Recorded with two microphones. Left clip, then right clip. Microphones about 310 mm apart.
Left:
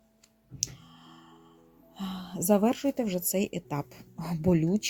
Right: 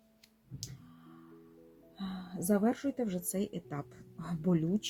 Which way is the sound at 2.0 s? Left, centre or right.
Left.